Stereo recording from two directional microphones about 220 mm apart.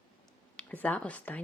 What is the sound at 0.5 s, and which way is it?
Speech, 5° left (ahead or behind).